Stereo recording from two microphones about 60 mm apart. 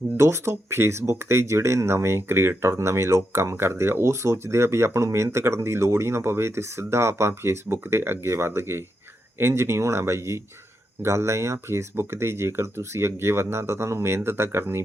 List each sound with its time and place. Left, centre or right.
0.2 s speech: right